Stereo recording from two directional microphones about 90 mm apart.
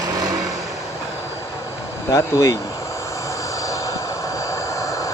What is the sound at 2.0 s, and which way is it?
Speech, 40° left (ahead or behind).